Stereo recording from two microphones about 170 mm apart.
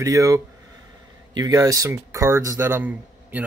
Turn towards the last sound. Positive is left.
turn(degrees=-10)  # may be behind; listen again after turning